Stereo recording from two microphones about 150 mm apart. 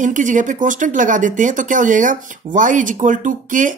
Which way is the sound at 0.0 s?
60° right (ahead or behind).